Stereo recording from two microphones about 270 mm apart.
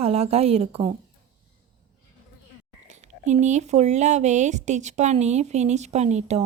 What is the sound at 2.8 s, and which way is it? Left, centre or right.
A woman's voice, right.